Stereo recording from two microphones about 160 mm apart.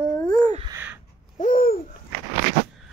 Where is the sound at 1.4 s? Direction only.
60° left (ahead or behind).